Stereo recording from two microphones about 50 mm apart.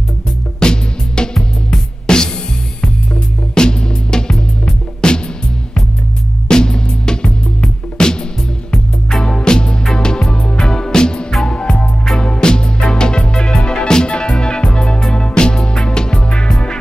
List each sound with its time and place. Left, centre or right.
0.6 s music: centre
3.5 s music: centre
6.5 s music: centre